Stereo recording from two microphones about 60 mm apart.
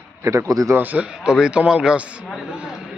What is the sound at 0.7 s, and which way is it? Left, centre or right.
Speech, right.